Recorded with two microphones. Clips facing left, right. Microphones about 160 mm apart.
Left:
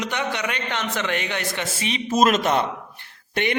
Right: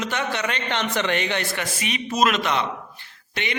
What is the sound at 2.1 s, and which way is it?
Speech, 45° left (ahead or behind).